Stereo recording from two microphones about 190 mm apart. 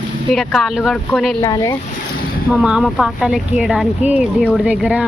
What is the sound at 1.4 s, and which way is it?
Speech, 20° left (ahead or behind).